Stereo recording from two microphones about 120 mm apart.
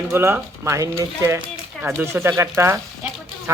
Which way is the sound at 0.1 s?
20° right (ahead or behind).